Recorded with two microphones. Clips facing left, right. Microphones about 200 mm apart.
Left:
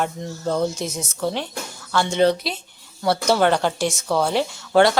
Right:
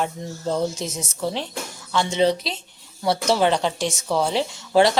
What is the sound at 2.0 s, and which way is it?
Speech, centre (ahead or behind).